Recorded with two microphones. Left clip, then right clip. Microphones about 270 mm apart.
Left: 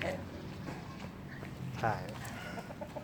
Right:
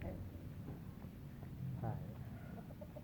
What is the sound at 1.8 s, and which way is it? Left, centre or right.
Speech, left.